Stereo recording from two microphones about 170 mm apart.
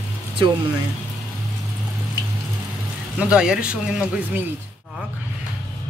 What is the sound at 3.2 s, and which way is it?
Speech, 5° right (ahead or behind).